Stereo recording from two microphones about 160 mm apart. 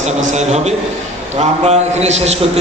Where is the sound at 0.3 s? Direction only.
45° right (ahead or behind).